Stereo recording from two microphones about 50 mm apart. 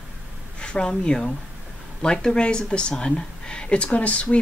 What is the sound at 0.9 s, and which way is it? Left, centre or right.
Speech, centre.